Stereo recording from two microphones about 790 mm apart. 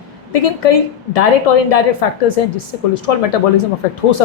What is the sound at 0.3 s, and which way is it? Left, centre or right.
A woman's voice, left.